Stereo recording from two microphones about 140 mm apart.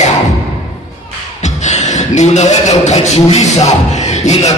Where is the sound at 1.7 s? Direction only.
55° left (ahead or behind).